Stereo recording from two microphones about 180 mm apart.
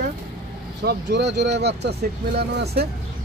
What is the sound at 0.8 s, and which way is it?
Speech, 70° right (ahead or behind).